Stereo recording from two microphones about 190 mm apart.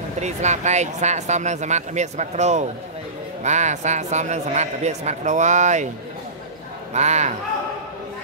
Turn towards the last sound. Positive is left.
turn(degrees=-35)  # may be behind; listen again after turning